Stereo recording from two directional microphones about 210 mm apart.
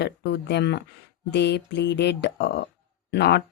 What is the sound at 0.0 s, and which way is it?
Speech, 55° left (ahead or behind).